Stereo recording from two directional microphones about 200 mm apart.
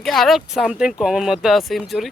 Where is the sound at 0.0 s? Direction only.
Centre (ahead or behind).